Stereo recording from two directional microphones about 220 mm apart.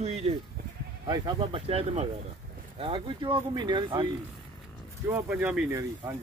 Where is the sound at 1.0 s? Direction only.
20° right (ahead or behind).